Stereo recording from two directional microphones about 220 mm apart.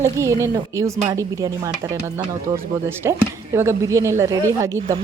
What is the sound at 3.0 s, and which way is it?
A woman's voice, 15° right (ahead or behind).